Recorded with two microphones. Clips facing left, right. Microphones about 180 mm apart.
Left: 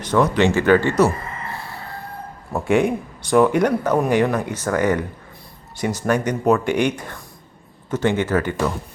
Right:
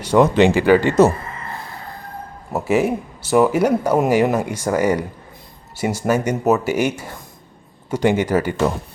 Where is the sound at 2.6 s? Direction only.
5° right (ahead or behind).